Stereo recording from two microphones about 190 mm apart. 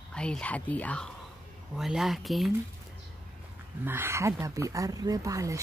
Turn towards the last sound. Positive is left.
turn(degrees=-15)  # may be behind; listen again after turning